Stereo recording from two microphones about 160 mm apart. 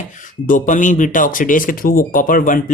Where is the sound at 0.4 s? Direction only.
55° left (ahead or behind).